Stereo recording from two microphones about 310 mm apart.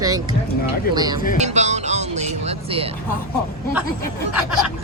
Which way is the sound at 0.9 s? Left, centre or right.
Centre.